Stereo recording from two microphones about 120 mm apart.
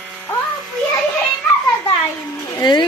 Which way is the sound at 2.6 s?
40° left (ahead or behind).